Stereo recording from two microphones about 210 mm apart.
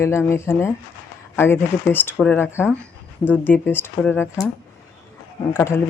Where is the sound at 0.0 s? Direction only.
10° left (ahead or behind).